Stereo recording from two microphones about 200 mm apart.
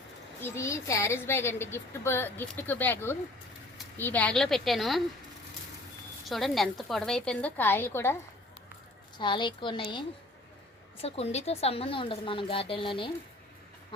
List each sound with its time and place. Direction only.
0.4 s a woman's voice: 15° left (ahead or behind)
6.2 s a woman's voice: centre (ahead or behind)
9.1 s a woman's voice: 25° left (ahead or behind)